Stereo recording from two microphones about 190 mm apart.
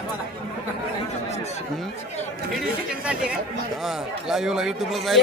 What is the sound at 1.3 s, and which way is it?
Chatter, 35° left (ahead or behind).